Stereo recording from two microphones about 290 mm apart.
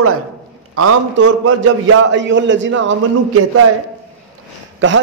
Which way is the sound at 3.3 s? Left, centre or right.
Right.